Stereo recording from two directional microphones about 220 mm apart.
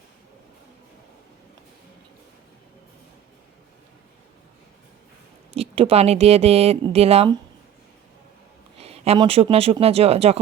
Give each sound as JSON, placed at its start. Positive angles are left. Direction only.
{"t": 5.5, "sound": "speech", "side_deg": -25}
{"t": 8.8, "sound": "speech", "side_deg": -25}